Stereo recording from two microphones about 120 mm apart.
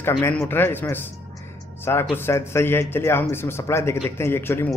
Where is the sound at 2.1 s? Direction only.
20° left (ahead or behind).